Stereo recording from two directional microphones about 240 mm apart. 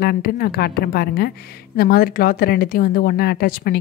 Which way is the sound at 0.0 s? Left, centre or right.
Left.